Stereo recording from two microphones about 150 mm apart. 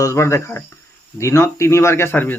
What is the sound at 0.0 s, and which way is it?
Speech, 20° left (ahead or behind).